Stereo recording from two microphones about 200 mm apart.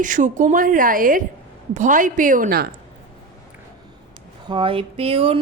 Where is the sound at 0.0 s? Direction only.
40° right (ahead or behind).